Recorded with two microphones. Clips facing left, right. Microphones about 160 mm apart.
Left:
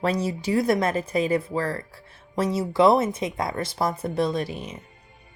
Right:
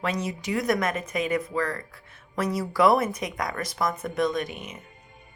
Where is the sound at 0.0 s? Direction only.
35° left (ahead or behind).